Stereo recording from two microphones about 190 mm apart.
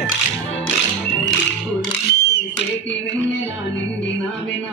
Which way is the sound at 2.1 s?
55° left (ahead or behind).